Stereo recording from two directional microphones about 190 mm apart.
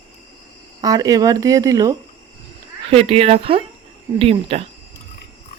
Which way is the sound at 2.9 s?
30° right (ahead or behind).